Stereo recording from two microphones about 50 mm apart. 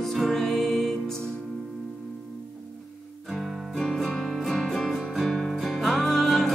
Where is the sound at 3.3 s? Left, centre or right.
Centre.